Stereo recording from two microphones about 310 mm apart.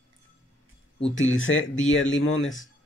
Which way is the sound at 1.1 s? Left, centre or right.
Left.